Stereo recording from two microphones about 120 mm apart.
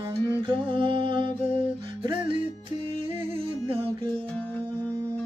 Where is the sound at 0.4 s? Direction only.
45° right (ahead or behind).